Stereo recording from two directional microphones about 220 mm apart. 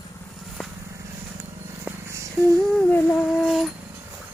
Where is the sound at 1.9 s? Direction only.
10° right (ahead or behind).